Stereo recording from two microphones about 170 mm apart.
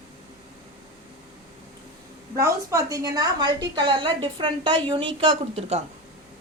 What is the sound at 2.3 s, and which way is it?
A woman's voice, 20° right (ahead or behind).